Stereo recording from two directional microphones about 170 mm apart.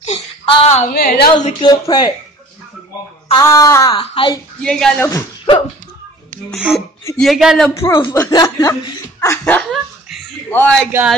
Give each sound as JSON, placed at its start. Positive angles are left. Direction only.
{"t": 0.0, "sound": "a sound", "side_deg": 40}
{"t": 0.9, "sound": "a woman's voice", "side_deg": 65}
{"t": 1.6, "sound": "speech", "side_deg": 25}
{"t": 3.3, "sound": "speech", "side_deg": 20}
{"t": 3.9, "sound": "speech", "side_deg": 35}
{"t": 4.6, "sound": "speech", "side_deg": 5}
{"t": 5.0, "sound": "speech", "side_deg": 20}
{"t": 7.2, "sound": "speech", "side_deg": 0}
{"t": 7.7, "sound": "speech", "side_deg": 15}
{"t": 9.6, "sound": "dog", "side_deg": 0}
{"t": 10.5, "sound": "speech", "side_deg": 5}